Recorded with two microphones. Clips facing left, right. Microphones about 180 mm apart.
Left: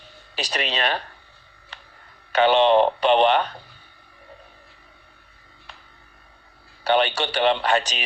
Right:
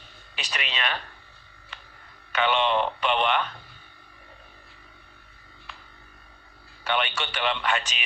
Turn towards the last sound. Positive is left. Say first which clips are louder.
# left 7 dB
turn(degrees=35)  # may be behind; listen again after turning